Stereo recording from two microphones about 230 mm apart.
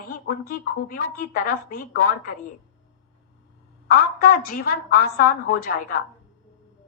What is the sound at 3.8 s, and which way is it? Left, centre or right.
A woman's voice, left.